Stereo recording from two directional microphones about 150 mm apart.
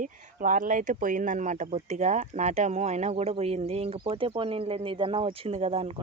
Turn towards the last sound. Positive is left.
turn(degrees=-40)  # may be behind; listen again after turning